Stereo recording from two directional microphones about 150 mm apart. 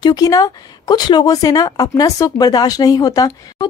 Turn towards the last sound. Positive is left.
turn(degrees=25)  # may be behind; listen again after turning